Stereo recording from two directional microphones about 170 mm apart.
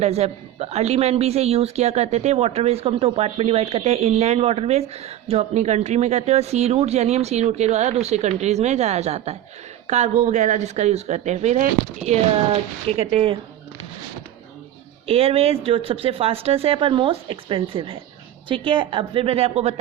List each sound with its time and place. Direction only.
0.0 s speech: 40° right (ahead or behind)
15.0 s speech: 35° right (ahead or behind)